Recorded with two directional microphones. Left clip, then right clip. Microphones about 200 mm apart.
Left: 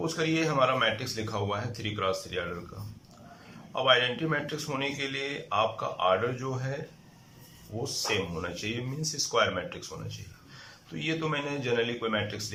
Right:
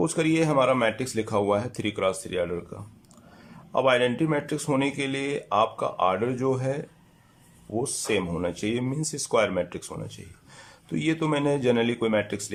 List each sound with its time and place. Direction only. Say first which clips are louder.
0.0 s a man's voice: right 5 dB; 35° right (ahead or behind)
3.7 s a man's voice: right 3 dB; 30° right (ahead or behind)
7.9 s a man's voice: right 1 dB; 30° right (ahead or behind)